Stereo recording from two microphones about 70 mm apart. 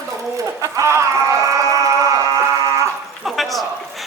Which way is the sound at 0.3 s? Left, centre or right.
Right.